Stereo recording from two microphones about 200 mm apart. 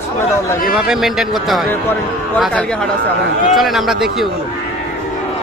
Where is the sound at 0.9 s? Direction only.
Centre (ahead or behind).